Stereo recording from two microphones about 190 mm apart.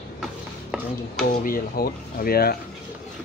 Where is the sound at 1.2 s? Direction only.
50° left (ahead or behind).